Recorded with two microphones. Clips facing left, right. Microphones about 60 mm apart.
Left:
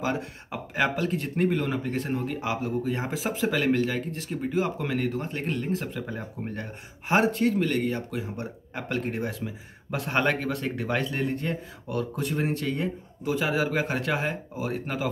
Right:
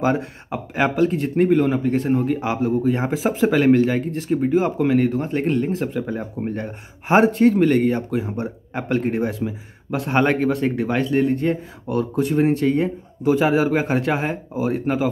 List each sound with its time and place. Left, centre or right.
0.0 s speech: right
5.7 s speech: centre
9.8 s speech: centre
13.2 s speech: right